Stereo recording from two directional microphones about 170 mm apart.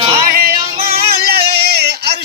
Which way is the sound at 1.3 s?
70° right (ahead or behind).